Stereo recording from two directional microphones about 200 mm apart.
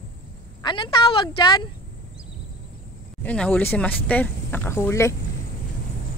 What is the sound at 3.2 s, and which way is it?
Speech, 5° left (ahead or behind).